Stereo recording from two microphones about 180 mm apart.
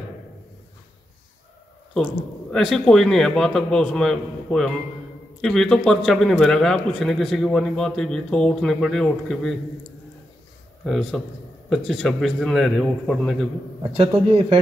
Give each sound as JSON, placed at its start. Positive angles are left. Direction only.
{"t": 2.5, "sound": "a man's voice", "side_deg": 0}
{"t": 10.9, "sound": "a man's voice", "side_deg": 0}
{"t": 13.9, "sound": "speech", "side_deg": -35}